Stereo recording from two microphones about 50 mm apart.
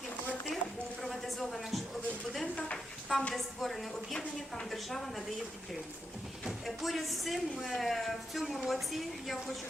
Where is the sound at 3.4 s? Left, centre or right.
Centre.